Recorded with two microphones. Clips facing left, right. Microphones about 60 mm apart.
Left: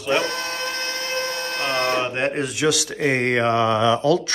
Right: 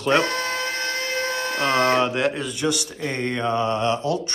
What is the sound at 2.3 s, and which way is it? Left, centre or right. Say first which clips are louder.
Mantra: left 3 dB; left.